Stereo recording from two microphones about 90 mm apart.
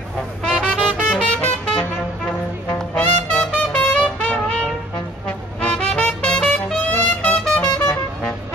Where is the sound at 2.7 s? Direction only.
15° left (ahead or behind).